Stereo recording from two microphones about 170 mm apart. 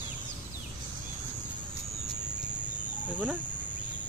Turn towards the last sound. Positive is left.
turn(degrees=-10)  # may be behind; listen again after turning